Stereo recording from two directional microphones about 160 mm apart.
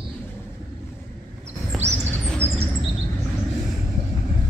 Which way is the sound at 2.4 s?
40° right (ahead or behind).